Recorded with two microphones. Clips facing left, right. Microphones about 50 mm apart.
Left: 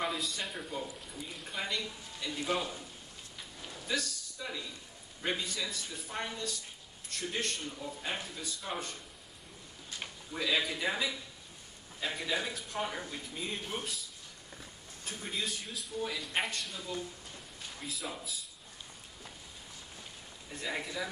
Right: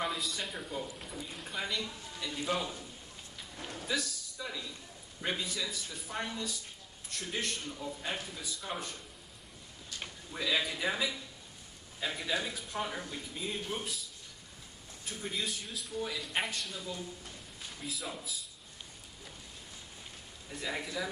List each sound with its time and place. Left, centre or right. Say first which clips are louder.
0.0 s speech: even; centre
3.5 s a sound: right 5 dB; right
3.8 s a man's voice: even; centre
4.4 s a sound: even; centre
5.2 s speech: even; centre
7.6 s a man's voice: even; centre
15.0 s speech: even; centre
20.6 s speech: even; centre